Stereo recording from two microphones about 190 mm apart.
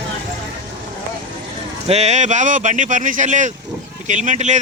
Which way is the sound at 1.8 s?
35° right (ahead or behind).